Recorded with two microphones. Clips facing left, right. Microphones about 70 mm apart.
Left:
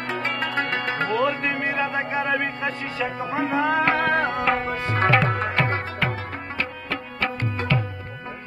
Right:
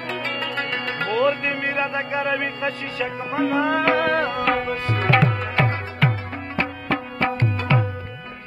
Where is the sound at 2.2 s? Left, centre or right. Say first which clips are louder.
Right 1 dB; centre.